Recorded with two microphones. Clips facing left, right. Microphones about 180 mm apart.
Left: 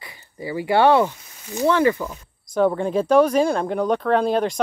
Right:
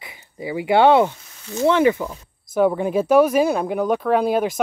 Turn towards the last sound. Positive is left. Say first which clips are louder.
# right 1 dB
turn(degrees=-10)  # may be behind; listen again after turning